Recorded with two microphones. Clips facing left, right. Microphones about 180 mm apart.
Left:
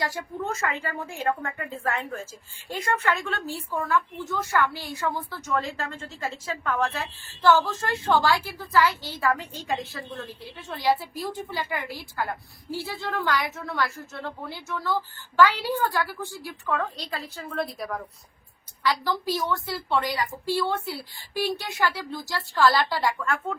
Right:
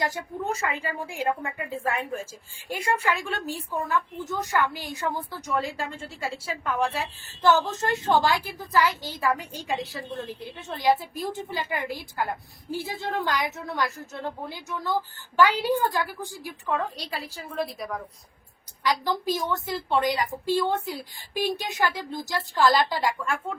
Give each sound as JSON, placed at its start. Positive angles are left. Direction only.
{"t": 0.0, "sound": "a woman's voice", "side_deg": -20}
{"t": 18.8, "sound": "a woman's voice", "side_deg": -15}